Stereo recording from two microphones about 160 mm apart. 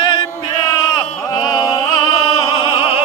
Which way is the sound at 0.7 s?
25° left (ahead or behind).